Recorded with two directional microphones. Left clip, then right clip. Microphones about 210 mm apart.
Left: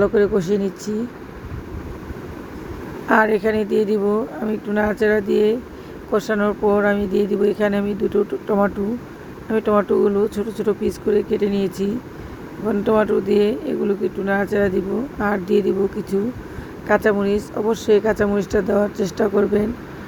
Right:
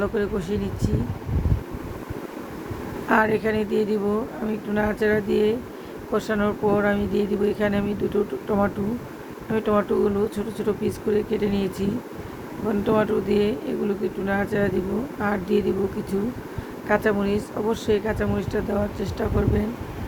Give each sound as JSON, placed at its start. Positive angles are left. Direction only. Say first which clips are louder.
{"t": 0.0, "sound": "speech", "louder": "left 8 dB", "side_deg": 20}
{"t": 3.1, "sound": "speech", "louder": "left 4 dB", "side_deg": 20}